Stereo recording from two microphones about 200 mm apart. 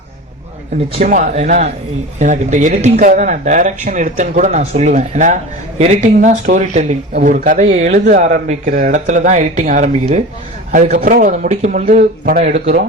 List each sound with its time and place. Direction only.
1.0 s speech: 40° right (ahead or behind)